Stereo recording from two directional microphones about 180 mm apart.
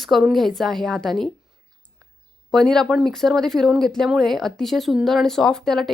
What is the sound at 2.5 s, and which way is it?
Speech, 5° left (ahead or behind).